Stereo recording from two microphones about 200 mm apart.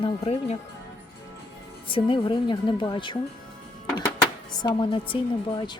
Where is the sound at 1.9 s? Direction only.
25° left (ahead or behind).